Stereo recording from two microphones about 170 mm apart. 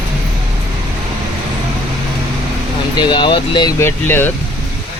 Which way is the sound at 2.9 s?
25° left (ahead or behind).